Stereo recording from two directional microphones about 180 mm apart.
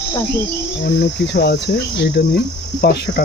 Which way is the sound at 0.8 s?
60° left (ahead or behind).